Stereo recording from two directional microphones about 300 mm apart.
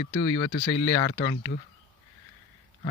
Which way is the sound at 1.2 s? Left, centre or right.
Centre.